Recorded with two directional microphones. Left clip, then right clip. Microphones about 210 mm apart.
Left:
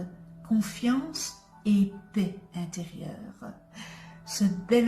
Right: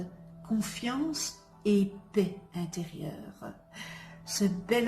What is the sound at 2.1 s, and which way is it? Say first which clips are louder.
Music: right 4 dB; 35° right (ahead or behind).